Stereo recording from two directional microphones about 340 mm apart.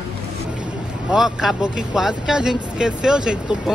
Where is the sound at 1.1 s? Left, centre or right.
Centre.